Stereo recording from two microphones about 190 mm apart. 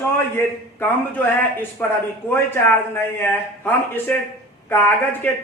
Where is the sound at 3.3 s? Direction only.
10° left (ahead or behind).